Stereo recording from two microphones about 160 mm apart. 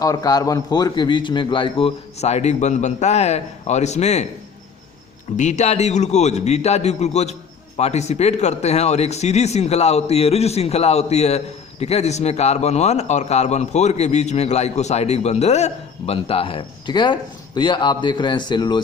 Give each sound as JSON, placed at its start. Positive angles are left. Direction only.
{"t": 0.0, "sound": "a man's voice", "side_deg": 20}
{"t": 5.4, "sound": "speech", "side_deg": 45}